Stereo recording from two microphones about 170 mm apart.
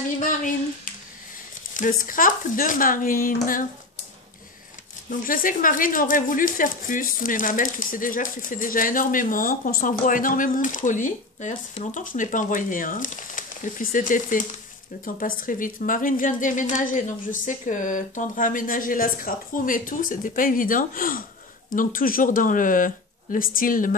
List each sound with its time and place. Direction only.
1.7 s speech: 50° left (ahead or behind)
5.2 s speech: 55° left (ahead or behind)